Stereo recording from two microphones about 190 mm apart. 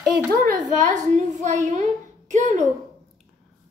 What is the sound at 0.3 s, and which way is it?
A child's voice, 40° right (ahead or behind).